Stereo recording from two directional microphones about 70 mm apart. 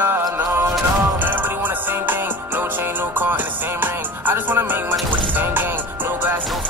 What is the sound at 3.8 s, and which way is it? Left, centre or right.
Music, right.